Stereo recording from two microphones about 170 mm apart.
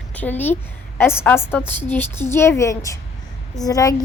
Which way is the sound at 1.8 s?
10° left (ahead or behind).